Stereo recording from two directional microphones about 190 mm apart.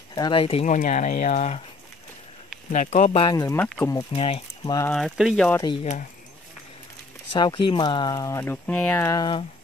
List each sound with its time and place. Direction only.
0.1 s speech: 25° left (ahead or behind)
2.7 s speech: 40° left (ahead or behind); by 3.5 s 20° left (ahead or behind)
3.5 s speech: 5° left (ahead or behind)
3.9 s speech: 30° left (ahead or behind)
4.9 s speech: centre (ahead or behind)
7.3 s speech: 25° left (ahead or behind)